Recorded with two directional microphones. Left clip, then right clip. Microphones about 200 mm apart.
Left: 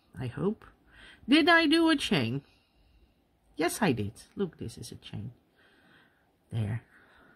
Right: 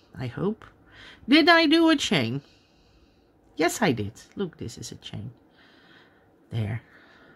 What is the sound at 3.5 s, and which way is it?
Speech, 5° left (ahead or behind).